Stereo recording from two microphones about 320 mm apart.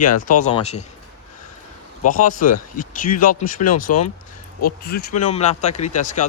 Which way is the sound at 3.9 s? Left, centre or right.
Left.